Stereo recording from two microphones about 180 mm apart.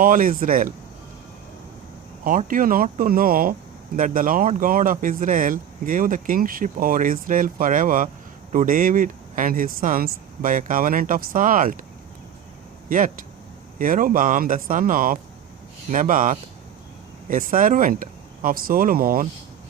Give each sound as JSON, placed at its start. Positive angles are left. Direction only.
{"t": 0.0, "sound": "speech", "side_deg": -50}
{"t": 2.2, "sound": "speech", "side_deg": -50}
{"t": 12.9, "sound": "speech", "side_deg": -50}